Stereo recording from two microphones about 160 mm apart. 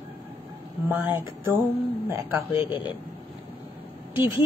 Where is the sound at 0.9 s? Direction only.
15° right (ahead or behind).